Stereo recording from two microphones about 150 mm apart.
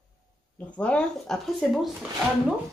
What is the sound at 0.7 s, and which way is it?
Speech, 10° left (ahead or behind).